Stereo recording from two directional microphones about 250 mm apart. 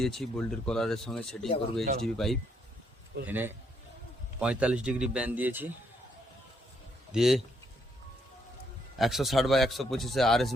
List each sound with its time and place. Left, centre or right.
0.0 s speech: centre
1.8 s speech: right
2.1 s a man's voice: centre
7.1 s speech: centre
9.0 s speech: centre